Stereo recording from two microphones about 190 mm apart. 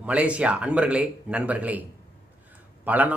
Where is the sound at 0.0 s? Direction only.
5° right (ahead or behind).